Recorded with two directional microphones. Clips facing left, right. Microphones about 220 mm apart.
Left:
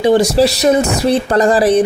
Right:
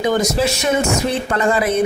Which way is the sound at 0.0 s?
30° left (ahead or behind).